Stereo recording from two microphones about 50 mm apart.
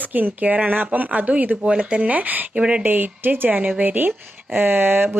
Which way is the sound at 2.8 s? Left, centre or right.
Right.